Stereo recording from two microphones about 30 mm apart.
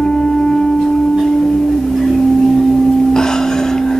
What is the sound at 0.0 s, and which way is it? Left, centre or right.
Singing bowl, centre.